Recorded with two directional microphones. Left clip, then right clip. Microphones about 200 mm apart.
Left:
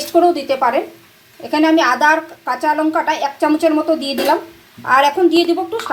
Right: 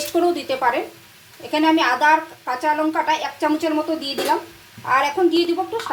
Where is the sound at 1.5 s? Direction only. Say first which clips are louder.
Left 4 dB; 20° left (ahead or behind).